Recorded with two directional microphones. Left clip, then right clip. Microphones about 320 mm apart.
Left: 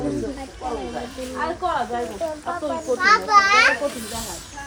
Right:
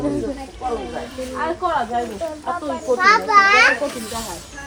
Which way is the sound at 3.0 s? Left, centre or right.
Centre.